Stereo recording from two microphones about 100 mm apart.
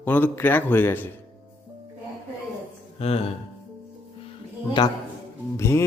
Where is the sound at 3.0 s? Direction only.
90° left.